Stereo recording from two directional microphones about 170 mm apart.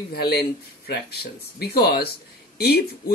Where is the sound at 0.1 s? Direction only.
65° left (ahead or behind).